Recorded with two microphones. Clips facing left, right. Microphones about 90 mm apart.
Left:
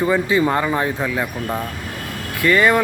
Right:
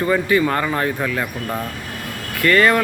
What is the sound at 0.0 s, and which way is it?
Speech, 15° left (ahead or behind).